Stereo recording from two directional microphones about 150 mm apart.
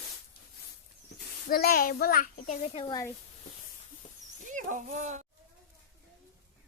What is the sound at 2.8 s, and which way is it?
Speech, 25° left (ahead or behind).